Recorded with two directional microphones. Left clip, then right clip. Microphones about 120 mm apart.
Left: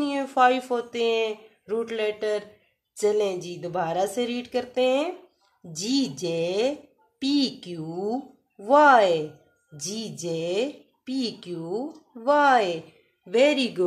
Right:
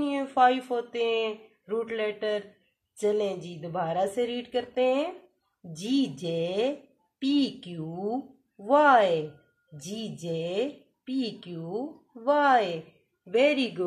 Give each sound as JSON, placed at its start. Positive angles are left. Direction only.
{"t": 0.0, "sound": "a woman's voice", "side_deg": 25}